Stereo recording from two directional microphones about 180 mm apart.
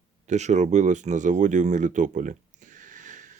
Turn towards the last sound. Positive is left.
turn(degrees=-45)  # may be behind; listen again after turning